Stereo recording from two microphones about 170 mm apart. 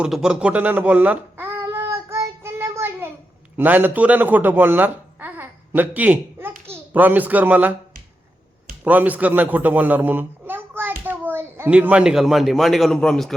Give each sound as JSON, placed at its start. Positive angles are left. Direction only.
{"t": 0.0, "sound": "a sound", "side_deg": -5}
{"t": 3.6, "sound": "a child's voice", "side_deg": -10}
{"t": 8.8, "sound": "a man's voice", "side_deg": -10}